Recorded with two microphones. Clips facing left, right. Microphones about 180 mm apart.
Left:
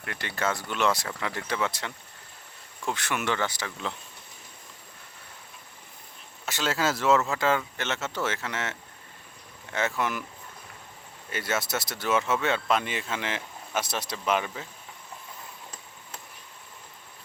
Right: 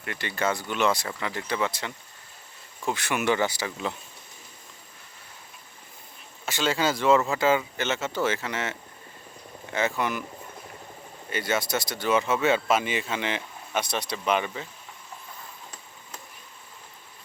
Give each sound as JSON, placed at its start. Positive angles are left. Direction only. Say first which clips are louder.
{"t": 0.0, "sound": "speech", "louder": "right 2 dB", "side_deg": 0}
{"t": 6.4, "sound": "speech", "louder": "right 2 dB", "side_deg": 0}
{"t": 11.3, "sound": "speech", "louder": "right 3 dB", "side_deg": 0}